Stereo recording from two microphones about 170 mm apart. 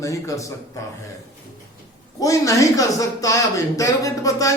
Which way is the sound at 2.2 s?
20° left (ahead or behind).